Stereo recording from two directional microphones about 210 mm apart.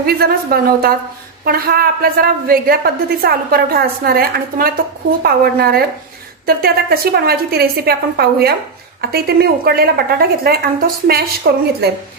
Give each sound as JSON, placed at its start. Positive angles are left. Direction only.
{"t": 0.0, "sound": "a woman's voice", "side_deg": -45}